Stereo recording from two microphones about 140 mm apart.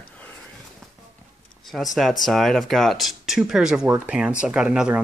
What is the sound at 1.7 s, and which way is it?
Speech, centre (ahead or behind).